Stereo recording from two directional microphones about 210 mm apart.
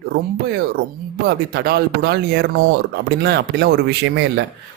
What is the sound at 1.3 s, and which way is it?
Speech, 50° right (ahead or behind).